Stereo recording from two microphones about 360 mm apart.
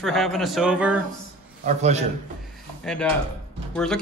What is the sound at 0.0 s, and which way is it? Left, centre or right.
Speech, centre.